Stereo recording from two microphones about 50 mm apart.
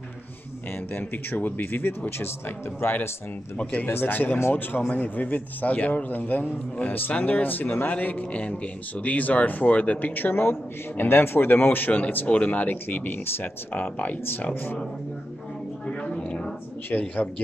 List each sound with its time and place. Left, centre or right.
0.7 s speech: left
14.5 s speech: left
15.9 s a sound: centre
16.9 s a man's voice: left